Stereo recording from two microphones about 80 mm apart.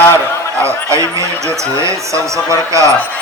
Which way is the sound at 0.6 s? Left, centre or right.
Right.